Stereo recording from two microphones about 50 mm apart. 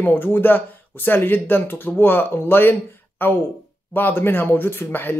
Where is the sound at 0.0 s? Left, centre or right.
Left.